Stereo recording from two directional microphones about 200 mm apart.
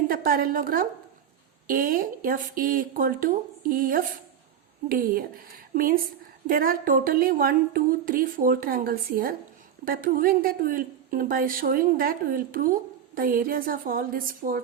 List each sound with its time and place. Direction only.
0.1 s a woman's voice: 45° right (ahead or behind)